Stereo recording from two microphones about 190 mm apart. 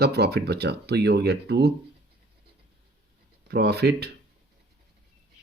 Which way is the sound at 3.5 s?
60° right (ahead or behind).